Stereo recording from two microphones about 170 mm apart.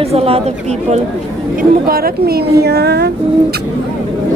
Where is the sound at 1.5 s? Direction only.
60° right (ahead or behind).